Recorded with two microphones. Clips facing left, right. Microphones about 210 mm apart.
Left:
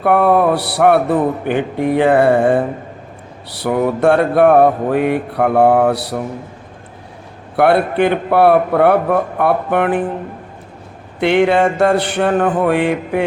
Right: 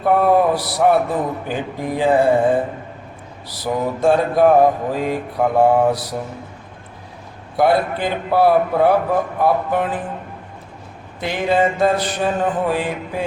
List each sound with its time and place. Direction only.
0.0 s speech: 65° left (ahead or behind)
7.5 s speech: 65° left (ahead or behind)
11.2 s mantra: 70° left (ahead or behind)